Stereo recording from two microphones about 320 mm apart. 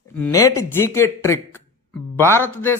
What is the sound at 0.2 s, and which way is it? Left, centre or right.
A man's voice, centre.